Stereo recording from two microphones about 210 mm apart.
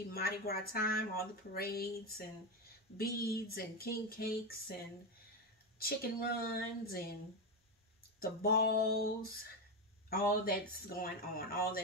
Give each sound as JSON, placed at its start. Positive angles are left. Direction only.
{"t": 0.1, "sound": "speech", "side_deg": 45}
{"t": 5.8, "sound": "speech", "side_deg": 45}
{"t": 8.2, "sound": "speech", "side_deg": 45}